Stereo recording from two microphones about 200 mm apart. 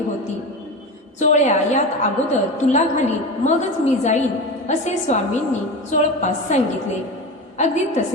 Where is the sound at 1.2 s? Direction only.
35° left (ahead or behind).